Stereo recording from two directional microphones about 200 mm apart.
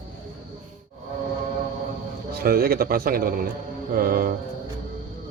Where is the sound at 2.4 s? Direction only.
50° right (ahead or behind).